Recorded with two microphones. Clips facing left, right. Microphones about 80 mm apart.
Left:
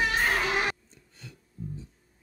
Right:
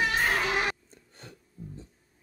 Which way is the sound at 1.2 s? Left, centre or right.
Right.